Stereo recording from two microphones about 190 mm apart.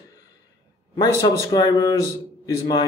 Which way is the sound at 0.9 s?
20° left (ahead or behind).